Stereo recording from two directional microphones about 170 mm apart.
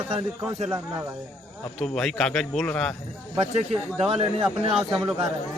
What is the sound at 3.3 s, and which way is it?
A man's voice, 30° right (ahead or behind).